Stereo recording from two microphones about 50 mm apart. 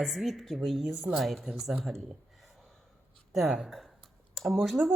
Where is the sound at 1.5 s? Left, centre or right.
Centre.